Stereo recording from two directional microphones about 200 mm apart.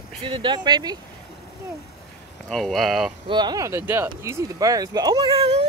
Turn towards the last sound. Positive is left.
turn(degrees=-30)  # may be behind; listen again after turning